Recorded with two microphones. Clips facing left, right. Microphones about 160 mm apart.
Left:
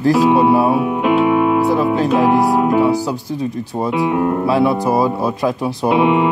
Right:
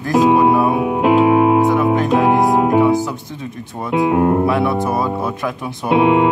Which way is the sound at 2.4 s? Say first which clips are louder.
Even; 20° right (ahead or behind).